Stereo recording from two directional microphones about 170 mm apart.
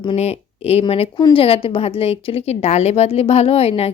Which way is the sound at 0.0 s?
35° left (ahead or behind).